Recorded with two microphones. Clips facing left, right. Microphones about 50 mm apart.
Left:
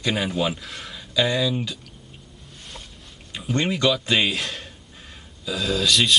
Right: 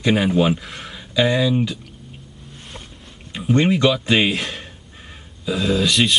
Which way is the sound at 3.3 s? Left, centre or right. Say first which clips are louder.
Right 7 dB; centre.